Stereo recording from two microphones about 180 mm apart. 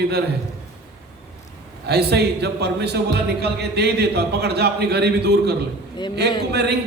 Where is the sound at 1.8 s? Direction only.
65° right (ahead or behind).